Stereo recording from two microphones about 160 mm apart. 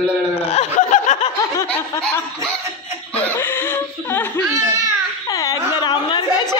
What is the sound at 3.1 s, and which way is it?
Laughter, 15° left (ahead or behind).